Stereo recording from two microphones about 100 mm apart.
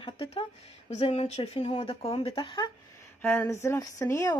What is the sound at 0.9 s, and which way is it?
Speech, 90° left.